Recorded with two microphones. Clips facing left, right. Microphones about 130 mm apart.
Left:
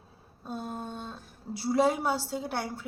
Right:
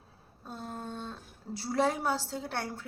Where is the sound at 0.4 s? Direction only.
15° left (ahead or behind).